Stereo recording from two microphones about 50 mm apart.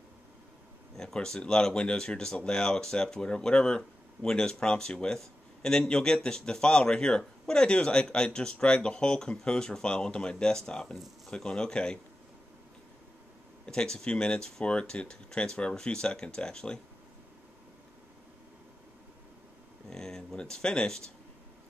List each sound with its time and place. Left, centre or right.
0.9 s speech: centre
13.7 s speech: centre
19.9 s speech: centre